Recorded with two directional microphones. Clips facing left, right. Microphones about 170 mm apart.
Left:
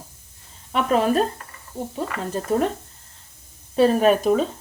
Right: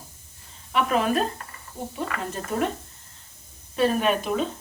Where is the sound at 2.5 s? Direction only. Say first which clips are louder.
Left 5 dB; 35° left (ahead or behind).